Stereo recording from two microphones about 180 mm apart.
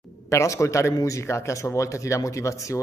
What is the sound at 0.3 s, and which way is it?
A man's voice, 15° left (ahead or behind).